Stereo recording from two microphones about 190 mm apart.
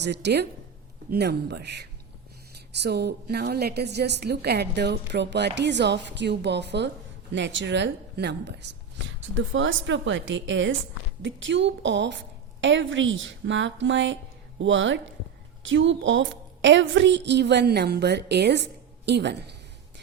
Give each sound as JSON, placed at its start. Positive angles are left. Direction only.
{"t": 0.0, "sound": "a woman's voice", "side_deg": -65}
{"t": 9.5, "sound": "a woman's voice", "side_deg": -85}